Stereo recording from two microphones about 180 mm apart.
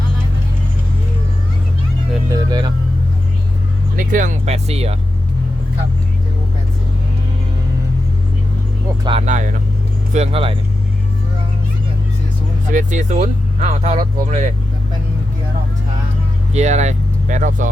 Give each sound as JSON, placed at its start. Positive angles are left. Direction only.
{"t": 2.3, "sound": "music", "side_deg": -25}
{"t": 3.9, "sound": "vehicle", "side_deg": -45}
{"t": 9.0, "sound": "speech", "side_deg": -35}
{"t": 12.7, "sound": "speech", "side_deg": -45}
{"t": 16.5, "sound": "speech", "side_deg": -40}